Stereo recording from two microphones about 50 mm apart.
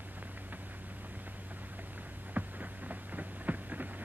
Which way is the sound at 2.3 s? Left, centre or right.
Right.